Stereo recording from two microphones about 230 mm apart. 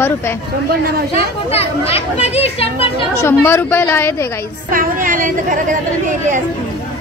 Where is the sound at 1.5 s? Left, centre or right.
Left.